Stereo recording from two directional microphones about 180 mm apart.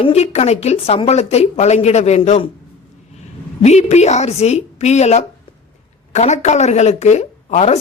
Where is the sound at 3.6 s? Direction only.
40° left (ahead or behind).